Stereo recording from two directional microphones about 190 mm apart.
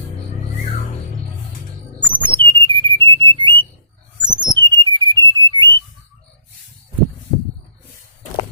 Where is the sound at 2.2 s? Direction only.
25° right (ahead or behind).